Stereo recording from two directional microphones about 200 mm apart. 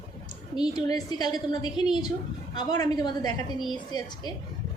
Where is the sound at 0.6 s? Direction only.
20° left (ahead or behind).